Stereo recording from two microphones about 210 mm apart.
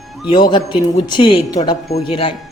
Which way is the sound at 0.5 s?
20° left (ahead or behind).